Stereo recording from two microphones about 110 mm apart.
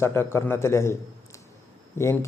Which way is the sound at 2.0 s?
25° left (ahead or behind).